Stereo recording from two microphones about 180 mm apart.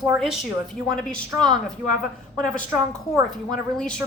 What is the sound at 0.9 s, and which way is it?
Speech, centre (ahead or behind).